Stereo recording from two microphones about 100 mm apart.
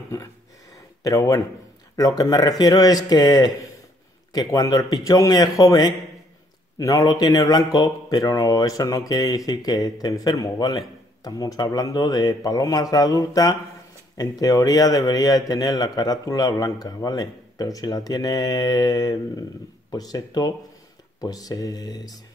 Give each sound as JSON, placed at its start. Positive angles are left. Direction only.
{"t": 1.0, "sound": "speech", "side_deg": 35}